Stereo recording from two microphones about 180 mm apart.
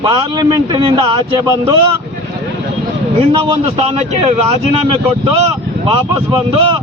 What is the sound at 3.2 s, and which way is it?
A man's voice, 30° right (ahead or behind).